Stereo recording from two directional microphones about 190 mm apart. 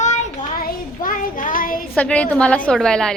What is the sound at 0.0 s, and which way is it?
Child singing, 45° left (ahead or behind).